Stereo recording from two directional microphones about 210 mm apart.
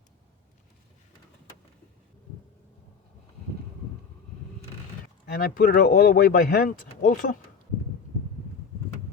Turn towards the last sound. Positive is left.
turn(degrees=40)  # may be behind; listen again after turning